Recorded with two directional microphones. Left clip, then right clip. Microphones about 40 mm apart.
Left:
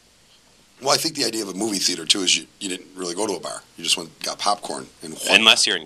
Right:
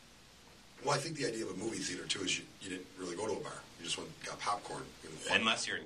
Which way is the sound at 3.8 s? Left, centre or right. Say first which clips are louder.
Left 18 dB; left.